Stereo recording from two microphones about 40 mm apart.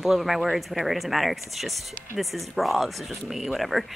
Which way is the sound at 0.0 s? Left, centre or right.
Centre.